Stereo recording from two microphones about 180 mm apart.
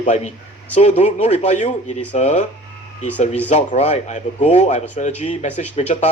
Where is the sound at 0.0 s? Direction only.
40° left (ahead or behind).